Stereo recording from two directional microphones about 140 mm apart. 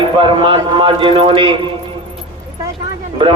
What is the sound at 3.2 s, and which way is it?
Speech, 35° right (ahead or behind).